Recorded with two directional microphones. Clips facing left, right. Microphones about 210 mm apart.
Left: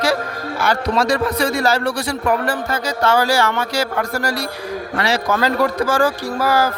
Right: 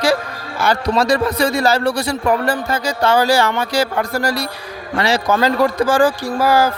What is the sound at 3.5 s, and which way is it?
A man's voice, 30° right (ahead or behind).